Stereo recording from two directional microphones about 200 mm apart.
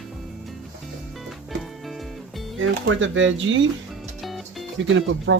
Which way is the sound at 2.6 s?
75° right (ahead or behind).